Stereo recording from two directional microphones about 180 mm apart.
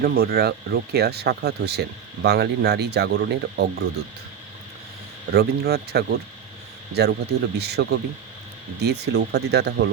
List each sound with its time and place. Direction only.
0.0 s speech: 60° right (ahead or behind)
5.3 s speech: 60° right (ahead or behind)